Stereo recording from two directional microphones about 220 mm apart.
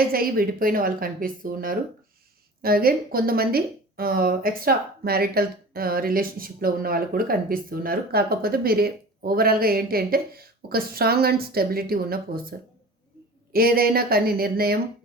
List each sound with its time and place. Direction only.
0.0 s a woman's voice: 40° right (ahead or behind)